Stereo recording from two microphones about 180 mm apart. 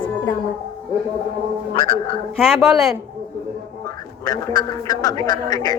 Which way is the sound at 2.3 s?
Centre (ahead or behind).